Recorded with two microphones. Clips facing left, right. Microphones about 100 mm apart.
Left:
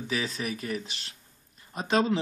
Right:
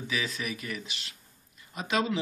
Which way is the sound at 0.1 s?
35° left (ahead or behind).